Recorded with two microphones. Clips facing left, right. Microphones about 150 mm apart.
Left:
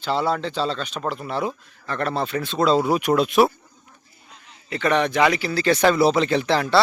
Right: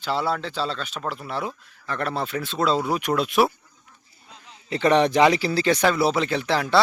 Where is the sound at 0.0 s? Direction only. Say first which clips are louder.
Left 3 dB; 5° right (ahead or behind).